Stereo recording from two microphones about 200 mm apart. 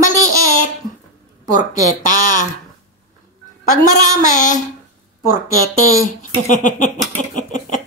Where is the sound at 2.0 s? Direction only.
40° left (ahead or behind).